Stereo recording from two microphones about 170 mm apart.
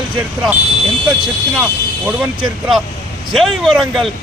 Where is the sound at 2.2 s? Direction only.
Centre (ahead or behind).